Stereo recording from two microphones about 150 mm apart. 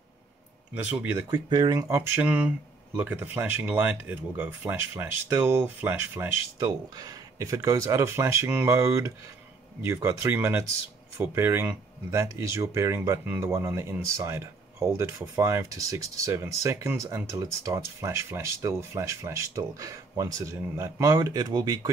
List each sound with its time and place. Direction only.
0.7 s speech: 15° right (ahead or behind)
1.3 s speech: 25° right (ahead or behind)